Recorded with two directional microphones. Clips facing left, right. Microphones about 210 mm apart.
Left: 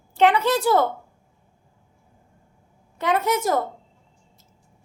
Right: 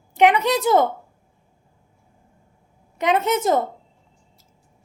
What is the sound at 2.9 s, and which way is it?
Speech, 20° right (ahead or behind).